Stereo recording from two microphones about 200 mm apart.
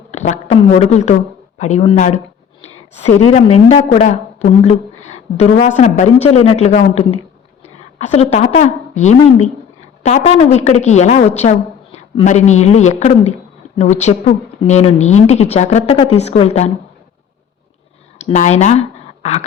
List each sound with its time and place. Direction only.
0.1 s a woman's voice: 35° left (ahead or behind)
18.2 s speech: 35° left (ahead or behind)